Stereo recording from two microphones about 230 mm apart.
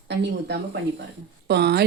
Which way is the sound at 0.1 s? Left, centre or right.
Right.